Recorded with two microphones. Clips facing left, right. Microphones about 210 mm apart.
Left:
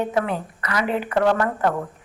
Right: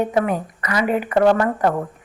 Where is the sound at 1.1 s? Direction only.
15° right (ahead or behind).